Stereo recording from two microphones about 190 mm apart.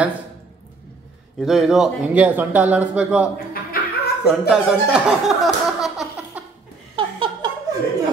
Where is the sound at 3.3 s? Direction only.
50° left (ahead or behind).